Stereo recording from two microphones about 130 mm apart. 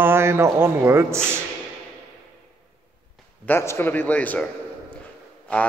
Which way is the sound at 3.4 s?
20° left (ahead or behind).